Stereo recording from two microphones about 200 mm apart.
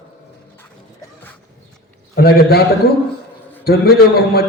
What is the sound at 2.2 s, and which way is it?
Speech, 50° left (ahead or behind).